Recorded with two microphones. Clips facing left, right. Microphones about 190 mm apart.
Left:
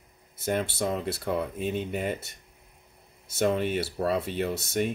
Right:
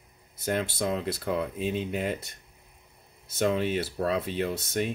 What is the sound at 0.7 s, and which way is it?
Speech, 5° left (ahead or behind).